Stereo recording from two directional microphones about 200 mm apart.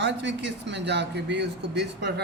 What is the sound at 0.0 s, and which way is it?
A man's voice, 60° right (ahead or behind).